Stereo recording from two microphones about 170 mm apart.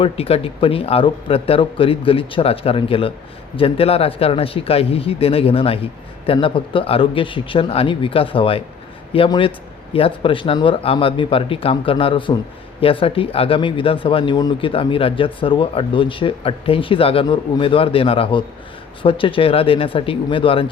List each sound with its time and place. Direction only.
0.0 s speech: 35° left (ahead or behind)